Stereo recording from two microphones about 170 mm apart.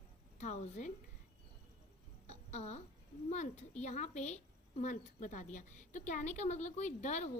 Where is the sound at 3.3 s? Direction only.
40° left (ahead or behind).